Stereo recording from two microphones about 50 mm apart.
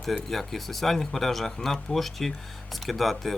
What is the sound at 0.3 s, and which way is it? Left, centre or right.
Speech, centre.